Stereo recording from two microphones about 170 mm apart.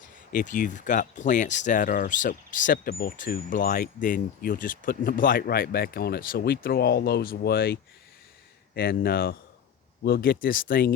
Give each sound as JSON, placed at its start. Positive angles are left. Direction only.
{"t": 0.3, "sound": "speech", "side_deg": 50}